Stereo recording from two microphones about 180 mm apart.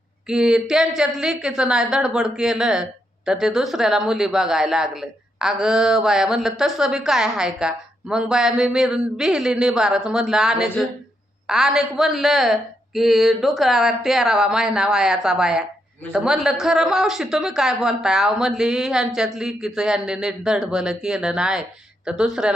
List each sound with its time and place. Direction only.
0.3 s a woman's voice: 5° right (ahead or behind)